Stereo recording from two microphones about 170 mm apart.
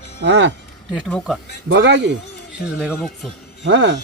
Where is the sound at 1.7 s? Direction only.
90° right.